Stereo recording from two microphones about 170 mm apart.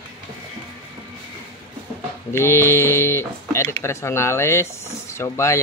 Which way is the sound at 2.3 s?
15° left (ahead or behind).